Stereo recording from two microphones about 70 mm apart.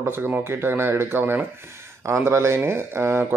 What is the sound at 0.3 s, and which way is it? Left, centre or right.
Speech, right.